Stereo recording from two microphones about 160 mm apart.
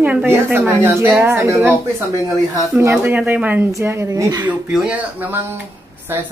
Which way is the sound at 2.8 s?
15° right (ahead or behind).